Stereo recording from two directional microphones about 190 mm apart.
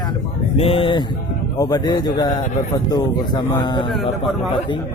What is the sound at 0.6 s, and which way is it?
Speech, 30° left (ahead or behind).